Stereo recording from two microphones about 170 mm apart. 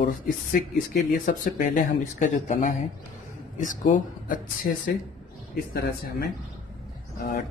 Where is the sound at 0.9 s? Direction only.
50° left (ahead or behind).